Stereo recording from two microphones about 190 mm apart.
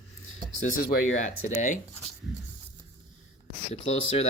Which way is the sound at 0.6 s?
50° left (ahead or behind).